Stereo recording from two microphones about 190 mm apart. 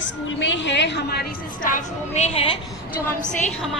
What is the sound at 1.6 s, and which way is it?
Speech, 40° left (ahead or behind).